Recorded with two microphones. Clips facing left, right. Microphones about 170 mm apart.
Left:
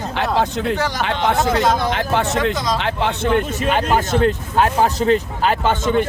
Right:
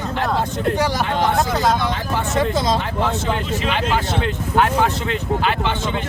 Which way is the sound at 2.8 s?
85° left.